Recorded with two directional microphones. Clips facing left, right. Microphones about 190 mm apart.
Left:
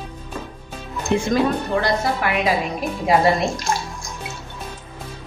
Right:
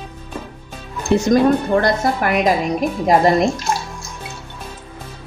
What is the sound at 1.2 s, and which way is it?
A woman's voice, 45° right (ahead or behind).